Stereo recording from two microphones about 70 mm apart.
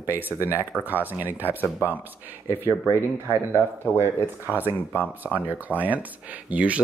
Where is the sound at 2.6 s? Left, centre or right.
Right; by 6.8 s centre.